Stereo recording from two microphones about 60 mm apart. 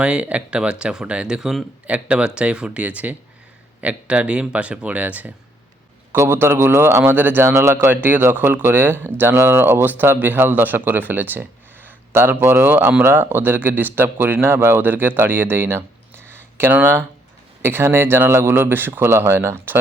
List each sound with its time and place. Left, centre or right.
0.0 s speech: centre
6.1 s a man's voice: right
7.0 s speech: right
7.4 s a man's voice: right
7.9 s speech: right